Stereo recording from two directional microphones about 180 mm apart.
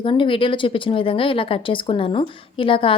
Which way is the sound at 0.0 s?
30° left (ahead or behind).